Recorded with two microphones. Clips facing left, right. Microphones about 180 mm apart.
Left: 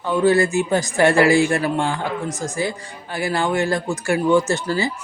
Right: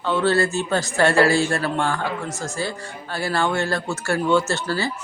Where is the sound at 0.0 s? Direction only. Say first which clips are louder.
Left 3 dB; 15° left (ahead or behind).